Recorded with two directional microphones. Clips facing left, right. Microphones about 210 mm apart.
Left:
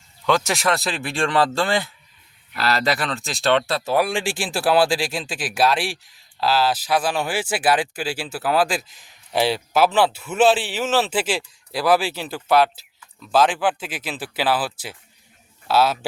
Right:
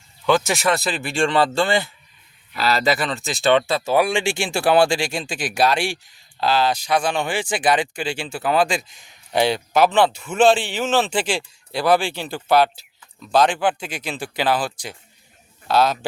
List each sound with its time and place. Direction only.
0.3 s a man's voice: centre (ahead or behind)